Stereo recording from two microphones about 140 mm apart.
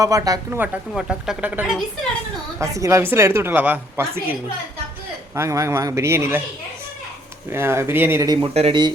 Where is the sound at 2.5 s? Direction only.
20° right (ahead or behind).